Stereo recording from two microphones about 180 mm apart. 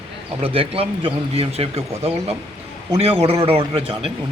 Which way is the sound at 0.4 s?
30° right (ahead or behind).